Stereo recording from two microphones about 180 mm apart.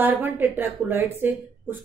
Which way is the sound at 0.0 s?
10° right (ahead or behind).